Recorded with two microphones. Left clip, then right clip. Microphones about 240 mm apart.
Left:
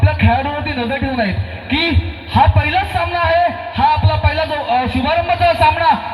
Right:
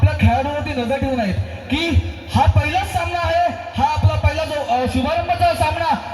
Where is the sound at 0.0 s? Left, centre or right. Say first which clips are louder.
Left 4 dB; right.